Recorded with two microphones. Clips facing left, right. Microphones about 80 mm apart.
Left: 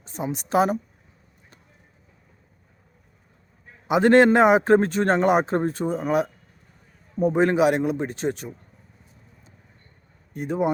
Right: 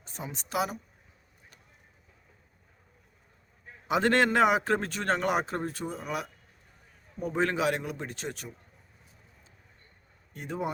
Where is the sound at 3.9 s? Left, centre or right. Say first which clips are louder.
Left 9 dB; left.